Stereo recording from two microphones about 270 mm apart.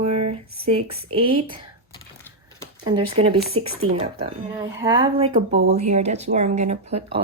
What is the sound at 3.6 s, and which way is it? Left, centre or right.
Speech, right.